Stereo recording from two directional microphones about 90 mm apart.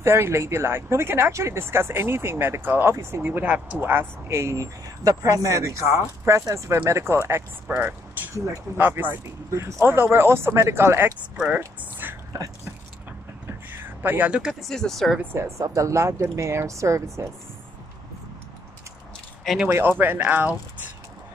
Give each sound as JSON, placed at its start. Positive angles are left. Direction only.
{"t": 0.0, "sound": "speech", "side_deg": -30}
{"t": 7.6, "sound": "speech", "side_deg": -15}
{"t": 11.3, "sound": "speech", "side_deg": -15}
{"t": 13.5, "sound": "a sound", "side_deg": -25}
{"t": 14.5, "sound": "speech", "side_deg": 5}
{"t": 15.3, "sound": "speech", "side_deg": -35}
{"t": 19.7, "sound": "speech", "side_deg": -25}